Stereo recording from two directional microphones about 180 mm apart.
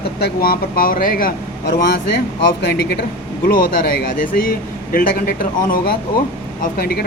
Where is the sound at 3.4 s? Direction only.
55° left (ahead or behind).